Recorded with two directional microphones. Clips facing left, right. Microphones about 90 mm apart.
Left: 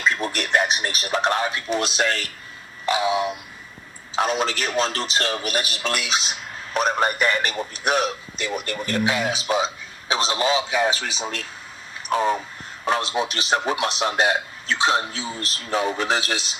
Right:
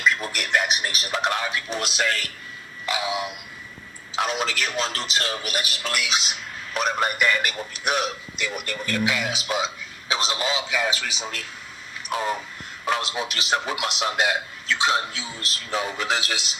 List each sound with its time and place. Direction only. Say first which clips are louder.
0.0 s a man's voice: left 1 dB; 35° left (ahead or behind)